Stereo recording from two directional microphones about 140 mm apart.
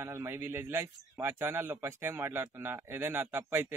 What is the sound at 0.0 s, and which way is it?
A man's voice, 20° right (ahead or behind).